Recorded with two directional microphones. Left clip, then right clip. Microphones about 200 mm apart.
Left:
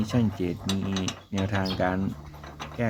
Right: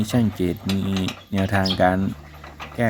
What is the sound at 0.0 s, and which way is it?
Speech, 20° right (ahead or behind).